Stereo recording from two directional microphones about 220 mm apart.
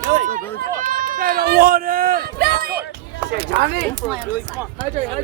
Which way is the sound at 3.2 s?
50° right (ahead or behind).